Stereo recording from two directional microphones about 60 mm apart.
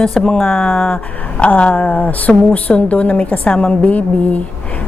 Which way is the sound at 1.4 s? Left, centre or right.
Centre.